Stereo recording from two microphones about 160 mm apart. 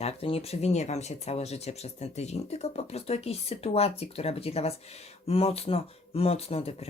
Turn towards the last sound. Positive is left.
turn(degrees=35)  # may be behind; listen again after turning